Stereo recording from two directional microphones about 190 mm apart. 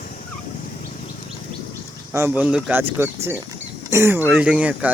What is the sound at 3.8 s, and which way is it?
Speech, 15° right (ahead or behind).